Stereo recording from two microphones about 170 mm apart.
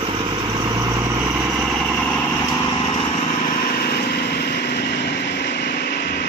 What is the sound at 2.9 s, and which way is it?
Vehicle, 30° left (ahead or behind).